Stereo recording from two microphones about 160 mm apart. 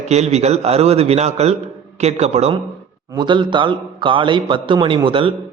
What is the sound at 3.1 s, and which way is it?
A man's voice, 30° right (ahead or behind).